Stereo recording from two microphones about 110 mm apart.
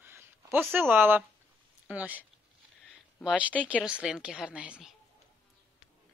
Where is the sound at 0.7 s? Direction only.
20° right (ahead or behind).